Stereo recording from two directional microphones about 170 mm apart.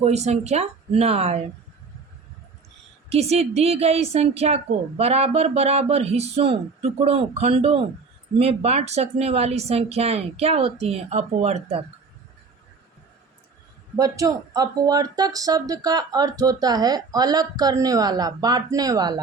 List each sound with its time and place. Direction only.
0.0 s a woman's voice: 40° right (ahead or behind)
3.1 s a woman's voice: 40° right (ahead or behind)
13.9 s speech: 20° right (ahead or behind)